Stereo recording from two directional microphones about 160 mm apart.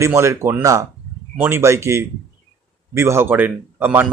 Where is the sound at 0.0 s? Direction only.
15° right (ahead or behind).